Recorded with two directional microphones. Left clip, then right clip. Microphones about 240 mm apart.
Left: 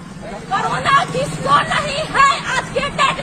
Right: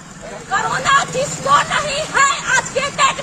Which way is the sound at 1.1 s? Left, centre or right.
Right.